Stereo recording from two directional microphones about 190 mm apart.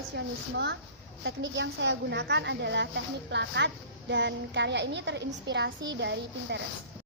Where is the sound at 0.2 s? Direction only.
65° right (ahead or behind).